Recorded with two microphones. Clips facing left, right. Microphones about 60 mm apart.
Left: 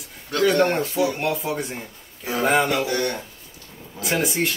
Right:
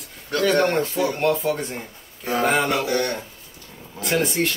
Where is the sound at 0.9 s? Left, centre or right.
Centre.